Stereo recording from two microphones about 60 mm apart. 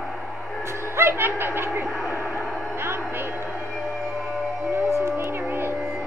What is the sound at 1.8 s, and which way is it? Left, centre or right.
Radio, centre.